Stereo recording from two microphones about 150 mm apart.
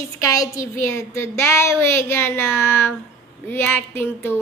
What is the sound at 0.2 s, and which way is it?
A woman's voice, 20° left (ahead or behind).